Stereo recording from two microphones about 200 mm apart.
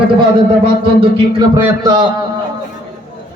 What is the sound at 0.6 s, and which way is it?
A man's voice, 25° right (ahead or behind).